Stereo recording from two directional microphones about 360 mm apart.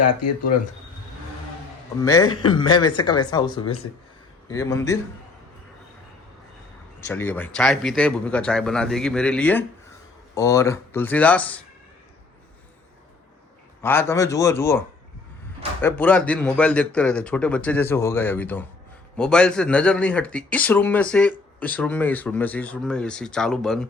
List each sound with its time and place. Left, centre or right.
0.0 s speech: left
2.0 s speech: centre
7.1 s a man's voice: centre
13.8 s a man's voice: centre